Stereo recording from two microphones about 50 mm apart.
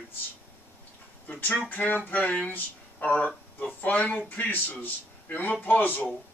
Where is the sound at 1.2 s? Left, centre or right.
Left.